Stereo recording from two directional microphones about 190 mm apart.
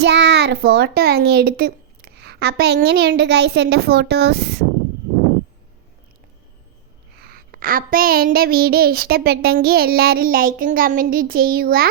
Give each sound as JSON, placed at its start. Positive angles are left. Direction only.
{"t": 0.0, "sound": "a child's voice", "side_deg": -65}
{"t": 7.2, "sound": "a child's voice", "side_deg": -50}